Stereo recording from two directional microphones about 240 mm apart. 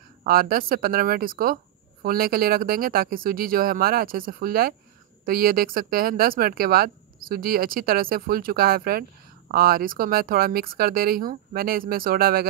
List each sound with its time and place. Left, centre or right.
0.2 s speech: right